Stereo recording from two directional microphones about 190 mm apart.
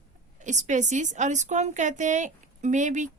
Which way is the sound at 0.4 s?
40° right (ahead or behind).